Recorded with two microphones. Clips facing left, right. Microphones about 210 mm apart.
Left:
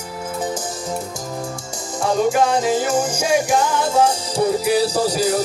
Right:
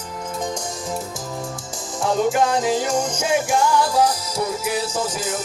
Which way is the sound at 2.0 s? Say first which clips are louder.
Left 2 dB; centre (ahead or behind).